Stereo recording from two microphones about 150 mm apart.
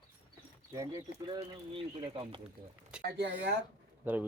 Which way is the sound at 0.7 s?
20° right (ahead or behind).